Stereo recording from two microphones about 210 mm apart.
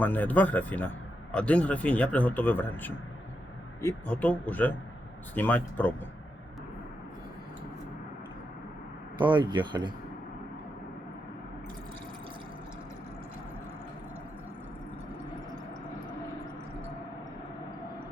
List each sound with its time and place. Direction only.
0.0 s speech: 10° left (ahead or behind)
9.1 s speech: 20° right (ahead or behind)